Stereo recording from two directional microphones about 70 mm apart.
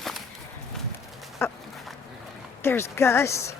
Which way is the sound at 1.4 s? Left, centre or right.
Left.